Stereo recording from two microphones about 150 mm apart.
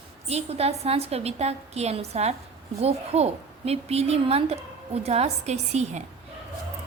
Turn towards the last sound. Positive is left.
turn(degrees=-50)  # may be behind; listen again after turning